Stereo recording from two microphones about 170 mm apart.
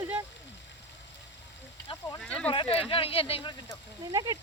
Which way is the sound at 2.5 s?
30° left (ahead or behind).